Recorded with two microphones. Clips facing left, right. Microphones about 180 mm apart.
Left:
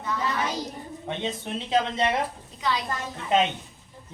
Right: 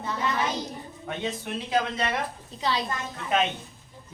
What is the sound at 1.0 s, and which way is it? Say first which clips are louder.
Speech: left 1 dB; 25° left (ahead or behind).